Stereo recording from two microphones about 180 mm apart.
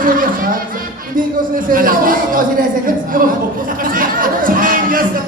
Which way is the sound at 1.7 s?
50° right (ahead or behind).